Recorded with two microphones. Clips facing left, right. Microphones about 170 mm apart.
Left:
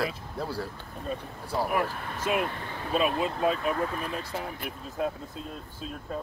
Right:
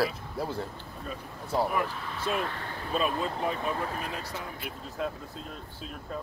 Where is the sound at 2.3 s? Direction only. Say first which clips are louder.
Left 3 dB; 15° left (ahead or behind).